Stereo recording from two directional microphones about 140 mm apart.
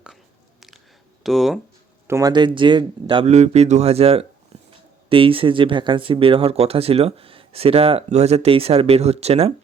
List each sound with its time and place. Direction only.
1.2 s speech: centre (ahead or behind)
2.0 s speech: 25° right (ahead or behind)
3.2 s speech: 50° right (ahead or behind)
4.5 s a sound: 50° right (ahead or behind)
5.0 s speech: 40° right (ahead or behind)